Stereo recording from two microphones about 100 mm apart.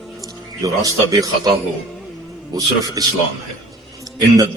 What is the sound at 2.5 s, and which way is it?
Speech, 35° right (ahead or behind).